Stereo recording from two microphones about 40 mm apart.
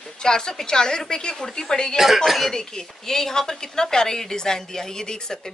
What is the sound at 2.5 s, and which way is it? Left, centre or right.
A woman's voice, centre.